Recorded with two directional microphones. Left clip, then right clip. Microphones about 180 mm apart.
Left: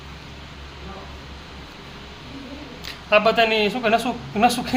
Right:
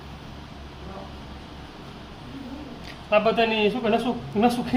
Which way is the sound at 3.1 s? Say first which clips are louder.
Left 4 dB; 15° left (ahead or behind).